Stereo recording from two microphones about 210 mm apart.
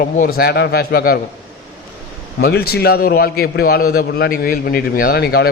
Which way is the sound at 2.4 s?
50° left (ahead or behind).